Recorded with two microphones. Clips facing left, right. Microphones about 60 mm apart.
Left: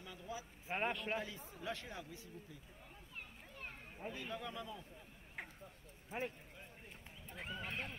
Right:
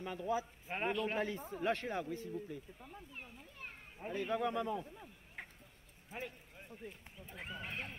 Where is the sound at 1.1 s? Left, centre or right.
Right.